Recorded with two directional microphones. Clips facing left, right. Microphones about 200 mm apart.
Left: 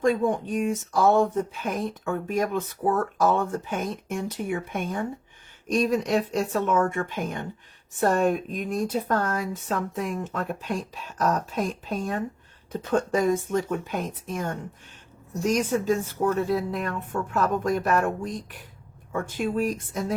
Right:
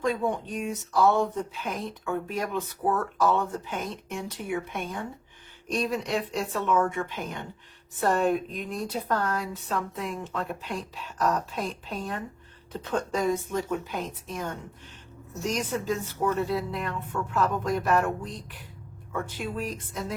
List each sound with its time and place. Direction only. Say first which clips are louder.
0.0 s speech: left 5 dB; 50° left (ahead or behind)
19.1 s speech: left 6 dB; 45° left (ahead or behind)